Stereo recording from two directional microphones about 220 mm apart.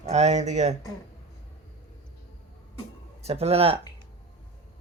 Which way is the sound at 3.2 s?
25° right (ahead or behind).